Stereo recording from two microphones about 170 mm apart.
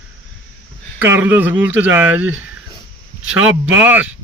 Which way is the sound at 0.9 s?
15° right (ahead or behind).